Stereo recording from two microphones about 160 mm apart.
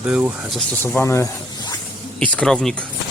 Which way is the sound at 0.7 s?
15° left (ahead or behind).